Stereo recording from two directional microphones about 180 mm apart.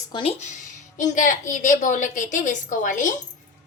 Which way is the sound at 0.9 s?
45° left (ahead or behind).